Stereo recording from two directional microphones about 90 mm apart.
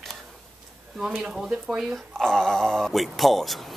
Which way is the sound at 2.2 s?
5° left (ahead or behind).